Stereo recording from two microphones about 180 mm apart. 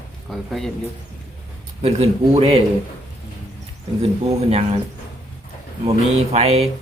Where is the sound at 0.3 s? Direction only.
Centre (ahead or behind).